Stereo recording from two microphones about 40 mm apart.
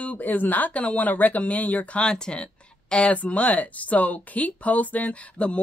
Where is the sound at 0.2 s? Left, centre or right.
Left.